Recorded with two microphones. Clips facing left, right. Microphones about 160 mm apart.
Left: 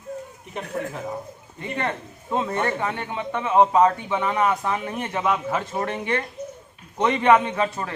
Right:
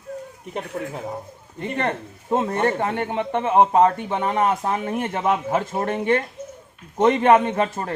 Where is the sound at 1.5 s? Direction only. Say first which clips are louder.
Right 3 dB; 45° right (ahead or behind).